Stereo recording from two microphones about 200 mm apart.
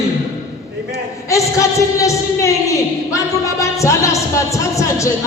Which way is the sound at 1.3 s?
15° left (ahead or behind).